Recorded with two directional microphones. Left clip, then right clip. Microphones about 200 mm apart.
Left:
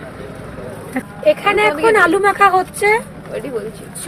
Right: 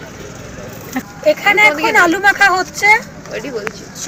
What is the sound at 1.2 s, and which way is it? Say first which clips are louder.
Speech: right 2 dB; 55° left (ahead or behind).